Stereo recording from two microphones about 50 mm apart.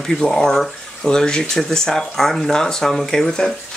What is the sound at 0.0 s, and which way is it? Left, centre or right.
Speech, centre.